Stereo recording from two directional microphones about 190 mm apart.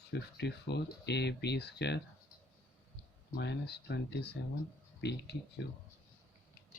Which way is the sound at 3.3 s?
60° left (ahead or behind).